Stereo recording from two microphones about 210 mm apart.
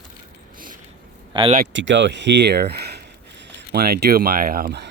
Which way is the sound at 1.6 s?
60° right (ahead or behind).